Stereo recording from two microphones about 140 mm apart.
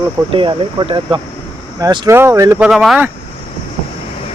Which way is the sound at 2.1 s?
20° right (ahead or behind).